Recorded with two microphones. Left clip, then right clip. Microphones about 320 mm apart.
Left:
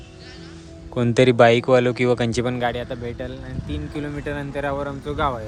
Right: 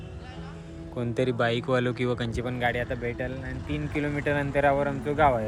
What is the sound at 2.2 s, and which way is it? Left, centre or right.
Speech, left.